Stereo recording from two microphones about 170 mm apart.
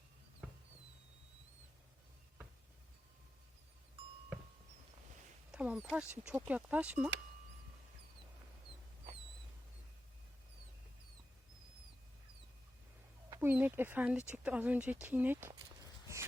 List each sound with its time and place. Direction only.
5.5 s speech: 5° right (ahead or behind)
13.3 s speech: 10° right (ahead or behind)